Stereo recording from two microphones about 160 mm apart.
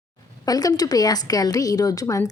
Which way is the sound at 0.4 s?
25° left (ahead or behind).